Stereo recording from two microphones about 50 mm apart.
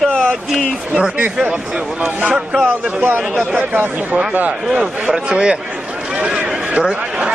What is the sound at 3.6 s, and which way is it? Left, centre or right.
Speech, right.